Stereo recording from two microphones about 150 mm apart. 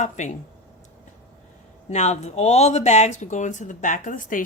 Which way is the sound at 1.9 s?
50° left (ahead or behind).